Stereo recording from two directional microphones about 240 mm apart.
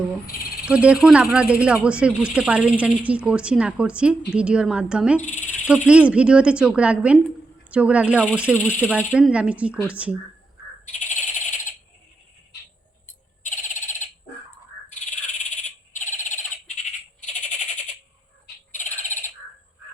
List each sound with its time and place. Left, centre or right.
0.6 s speech: centre
5.2 s cricket: left
5.9 s speech: centre
10.8 s frog: left
13.4 s frog: left
18.7 s frog: left